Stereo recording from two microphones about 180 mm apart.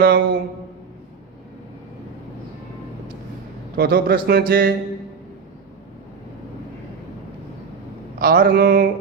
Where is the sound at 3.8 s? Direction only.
55° right (ahead or behind).